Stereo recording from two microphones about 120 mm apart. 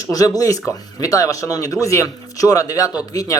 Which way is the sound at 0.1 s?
30° left (ahead or behind).